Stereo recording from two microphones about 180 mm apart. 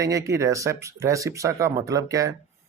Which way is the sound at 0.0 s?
20° right (ahead or behind).